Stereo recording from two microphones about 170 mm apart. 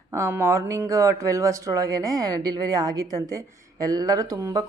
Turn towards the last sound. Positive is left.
turn(degrees=-20)  # may be behind; listen again after turning